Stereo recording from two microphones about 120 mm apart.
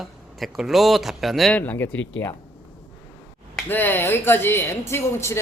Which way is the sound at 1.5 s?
15° left (ahead or behind).